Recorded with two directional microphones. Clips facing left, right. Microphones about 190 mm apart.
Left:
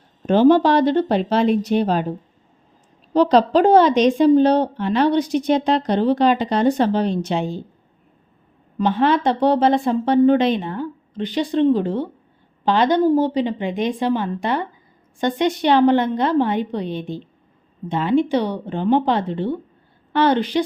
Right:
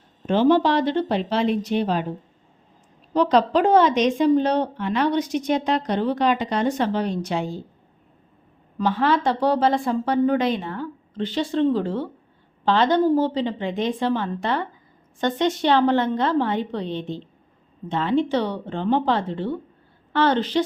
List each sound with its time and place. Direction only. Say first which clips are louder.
0.3 s a woman's voice: left 4 dB; 40° left (ahead or behind)
3.1 s a woman's voice: left 4 dB; 35° left (ahead or behind)
8.8 s a woman's voice: left 3 dB; 20° left (ahead or behind)